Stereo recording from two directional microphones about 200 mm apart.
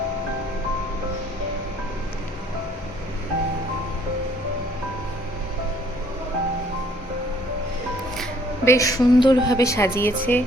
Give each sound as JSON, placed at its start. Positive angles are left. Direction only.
{"t": 8.6, "sound": "a woman's voice", "side_deg": 15}